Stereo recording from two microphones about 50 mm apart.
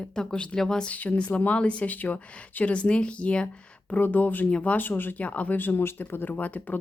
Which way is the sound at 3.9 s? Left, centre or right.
Left.